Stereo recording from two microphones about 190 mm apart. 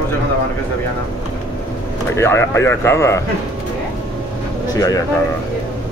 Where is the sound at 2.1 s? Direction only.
15° left (ahead or behind).